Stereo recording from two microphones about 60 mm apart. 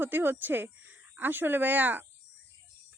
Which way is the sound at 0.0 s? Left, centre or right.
Right.